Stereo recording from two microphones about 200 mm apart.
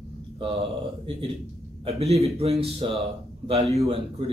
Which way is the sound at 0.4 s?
25° right (ahead or behind).